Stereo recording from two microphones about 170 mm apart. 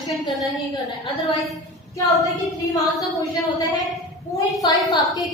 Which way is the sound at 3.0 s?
20° left (ahead or behind).